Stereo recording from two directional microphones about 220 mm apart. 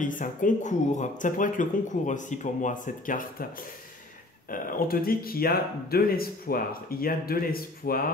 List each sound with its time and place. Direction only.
0.0 s speech: 35° left (ahead or behind)
4.5 s speech: 40° left (ahead or behind)